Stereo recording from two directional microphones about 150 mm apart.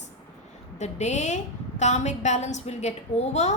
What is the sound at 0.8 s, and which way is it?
A woman's voice, 50° left (ahead or behind).